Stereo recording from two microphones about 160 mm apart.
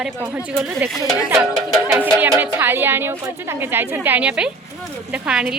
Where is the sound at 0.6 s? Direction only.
5° right (ahead or behind).